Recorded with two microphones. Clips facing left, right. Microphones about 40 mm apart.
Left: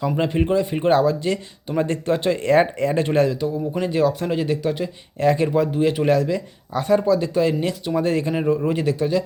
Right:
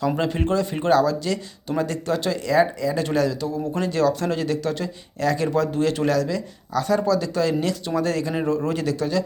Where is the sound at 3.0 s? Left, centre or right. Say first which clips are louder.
Left 3 dB; left.